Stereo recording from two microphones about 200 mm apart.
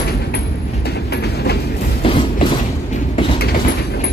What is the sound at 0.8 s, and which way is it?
Train, 55° left (ahead or behind).